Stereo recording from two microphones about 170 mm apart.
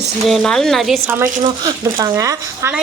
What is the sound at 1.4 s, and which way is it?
Speech, 25° right (ahead or behind).